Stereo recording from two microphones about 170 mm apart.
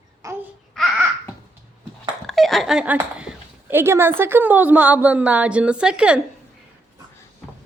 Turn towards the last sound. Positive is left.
turn(degrees=-5)  # may be behind; listen again after turning